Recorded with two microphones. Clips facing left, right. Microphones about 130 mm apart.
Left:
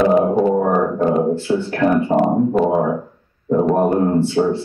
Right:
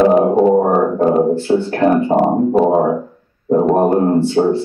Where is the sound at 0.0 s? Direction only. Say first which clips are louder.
Right 3 dB; 30° right (ahead or behind).